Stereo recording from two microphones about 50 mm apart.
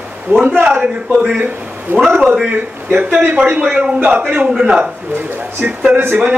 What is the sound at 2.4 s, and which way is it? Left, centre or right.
A man's voice, right.